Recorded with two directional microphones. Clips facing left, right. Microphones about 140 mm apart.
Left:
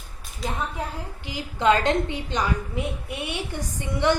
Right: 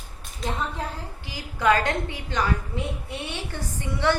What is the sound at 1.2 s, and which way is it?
A woman's voice, 20° left (ahead or behind).